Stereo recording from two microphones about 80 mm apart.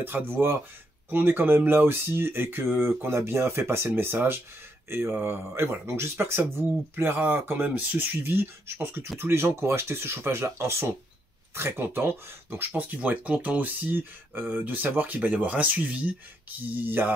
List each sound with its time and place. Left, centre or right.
0.0 s speech: right